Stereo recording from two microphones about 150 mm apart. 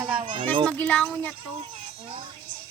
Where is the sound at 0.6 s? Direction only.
10° left (ahead or behind).